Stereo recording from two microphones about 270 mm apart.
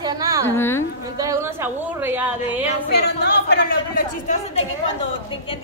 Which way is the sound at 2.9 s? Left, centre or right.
Left.